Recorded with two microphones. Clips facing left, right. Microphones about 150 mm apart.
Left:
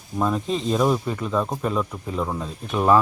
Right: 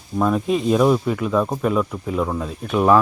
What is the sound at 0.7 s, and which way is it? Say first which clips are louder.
Speech: right 3 dB; centre (ahead or behind).